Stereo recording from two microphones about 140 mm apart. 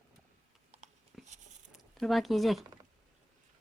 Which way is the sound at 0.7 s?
55° right (ahead or behind).